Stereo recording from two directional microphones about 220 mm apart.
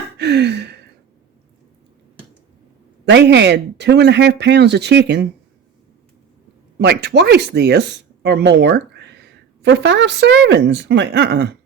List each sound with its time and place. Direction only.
0.2 s gasp: 50° right (ahead or behind)
3.1 s speech: 50° right (ahead or behind)
6.7 s speech: 50° right (ahead or behind)